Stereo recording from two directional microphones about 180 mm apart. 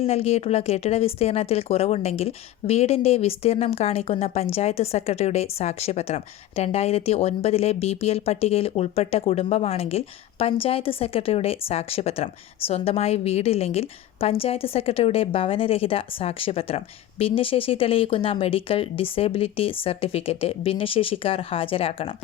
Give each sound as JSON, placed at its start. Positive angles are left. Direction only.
{"t": 0.0, "sound": "speech", "side_deg": 35}